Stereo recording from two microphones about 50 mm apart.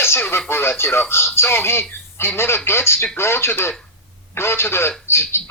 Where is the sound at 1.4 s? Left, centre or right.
Left.